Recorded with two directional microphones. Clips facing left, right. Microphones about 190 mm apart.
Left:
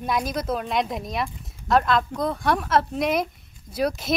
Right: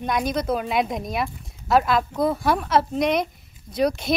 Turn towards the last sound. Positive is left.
turn(degrees=5)  # may be behind; listen again after turning